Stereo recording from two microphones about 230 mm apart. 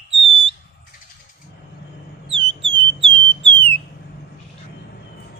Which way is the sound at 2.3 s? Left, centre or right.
Right.